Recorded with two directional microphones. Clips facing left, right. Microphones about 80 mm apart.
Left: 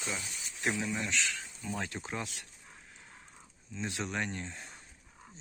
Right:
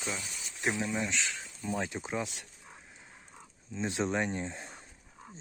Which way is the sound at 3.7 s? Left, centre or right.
Right.